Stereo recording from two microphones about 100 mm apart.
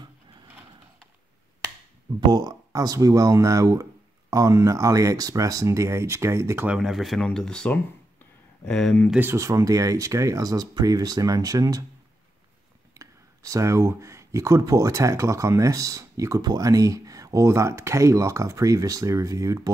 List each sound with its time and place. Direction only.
2.1 s speech: 40° right (ahead or behind)
6.8 s speech: centre (ahead or behind)
9.2 s speech: 30° right (ahead or behind)
12.9 s speech: 35° right (ahead or behind)